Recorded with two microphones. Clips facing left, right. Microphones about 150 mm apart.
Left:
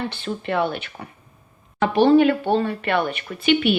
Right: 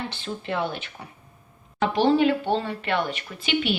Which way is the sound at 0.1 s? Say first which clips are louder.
Left 5 dB; 60° left (ahead or behind).